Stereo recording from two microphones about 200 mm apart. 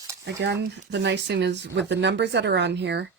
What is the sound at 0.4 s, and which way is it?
Speech, 60° right (ahead or behind).